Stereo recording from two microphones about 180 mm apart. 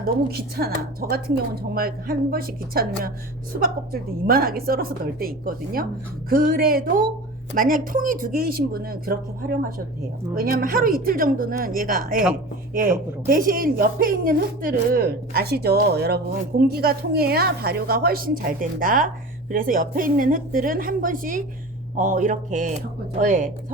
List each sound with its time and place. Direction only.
0.0 s a woman's voice: 55° right (ahead or behind)
10.3 s a woman's voice: 55° right (ahead or behind)